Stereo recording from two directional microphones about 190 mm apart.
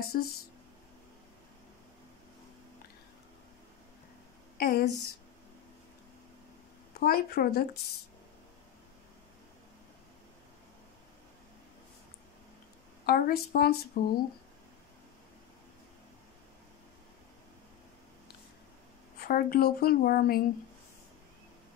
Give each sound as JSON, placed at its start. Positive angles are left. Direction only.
{"t": 0.0, "sound": "speech", "side_deg": 55}
{"t": 4.6, "sound": "speech", "side_deg": 50}
{"t": 6.9, "sound": "speech", "side_deg": 55}
{"t": 13.0, "sound": "speech", "side_deg": 55}
{"t": 19.1, "sound": "speech", "side_deg": 50}